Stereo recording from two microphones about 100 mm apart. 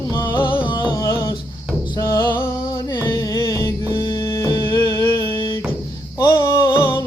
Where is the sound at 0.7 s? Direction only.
50° left (ahead or behind).